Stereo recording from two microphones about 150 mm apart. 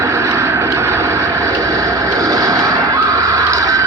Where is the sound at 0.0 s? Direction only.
20° right (ahead or behind).